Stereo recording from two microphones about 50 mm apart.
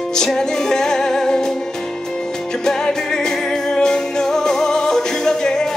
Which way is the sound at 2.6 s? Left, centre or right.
Centre.